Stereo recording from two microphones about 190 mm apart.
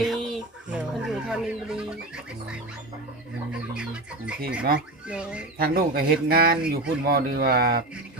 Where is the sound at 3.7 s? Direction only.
5° right (ahead or behind).